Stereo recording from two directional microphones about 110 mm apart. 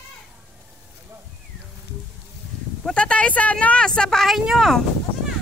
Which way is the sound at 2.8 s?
10° left (ahead or behind).